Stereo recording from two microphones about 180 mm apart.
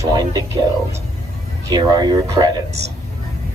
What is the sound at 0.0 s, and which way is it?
Speech, 20° right (ahead or behind).